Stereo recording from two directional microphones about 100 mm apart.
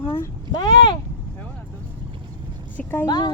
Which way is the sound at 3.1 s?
45° left (ahead or behind).